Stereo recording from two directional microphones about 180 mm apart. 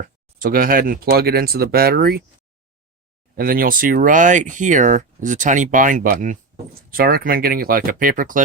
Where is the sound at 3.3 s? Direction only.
55° right (ahead or behind).